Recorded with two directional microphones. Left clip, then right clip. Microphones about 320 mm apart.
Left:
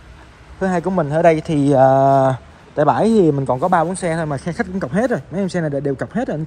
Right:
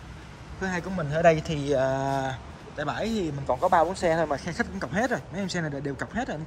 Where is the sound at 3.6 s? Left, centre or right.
Right.